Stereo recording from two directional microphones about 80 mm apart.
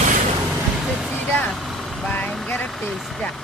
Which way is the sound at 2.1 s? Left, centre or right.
Centre.